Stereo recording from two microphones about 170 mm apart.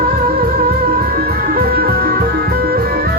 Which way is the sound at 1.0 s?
60° right (ahead or behind).